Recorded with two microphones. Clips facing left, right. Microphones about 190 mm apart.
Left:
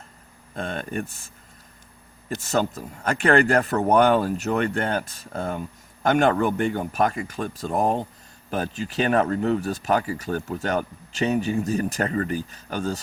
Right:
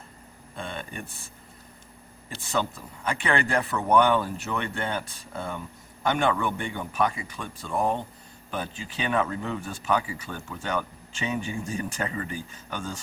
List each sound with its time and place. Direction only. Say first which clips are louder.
0.7 s speech: left 7 dB; 45° left (ahead or behind)
2.3 s speech: left 5 dB; 45° left (ahead or behind)